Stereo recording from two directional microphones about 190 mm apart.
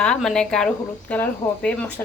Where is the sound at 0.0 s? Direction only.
5° left (ahead or behind).